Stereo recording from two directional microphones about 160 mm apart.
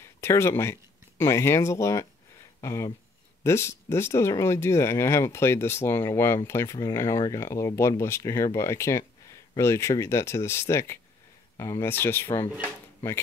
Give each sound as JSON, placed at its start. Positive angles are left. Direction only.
{"t": 0.0, "sound": "speech", "side_deg": 15}